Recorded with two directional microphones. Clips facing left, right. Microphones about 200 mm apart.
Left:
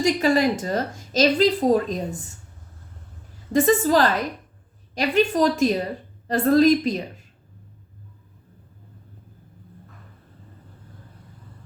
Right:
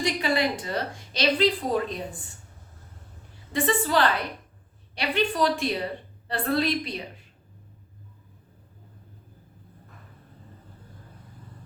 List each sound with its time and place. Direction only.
0.0 s a woman's voice: 45° left (ahead or behind)
3.5 s a woman's voice: 40° left (ahead or behind)